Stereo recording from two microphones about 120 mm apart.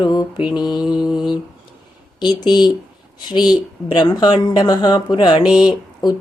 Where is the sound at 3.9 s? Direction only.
35° left (ahead or behind).